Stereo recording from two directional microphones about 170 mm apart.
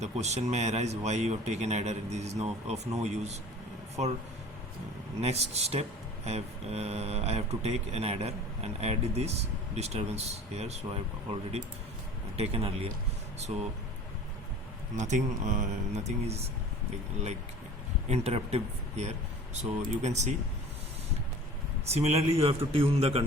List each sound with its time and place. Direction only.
0.0 s speech: 40° right (ahead or behind)
5.2 s speech: 40° right (ahead or behind)
14.9 s speech: 45° right (ahead or behind)
18.1 s speech: 40° right (ahead or behind)
21.8 s speech: 40° right (ahead or behind)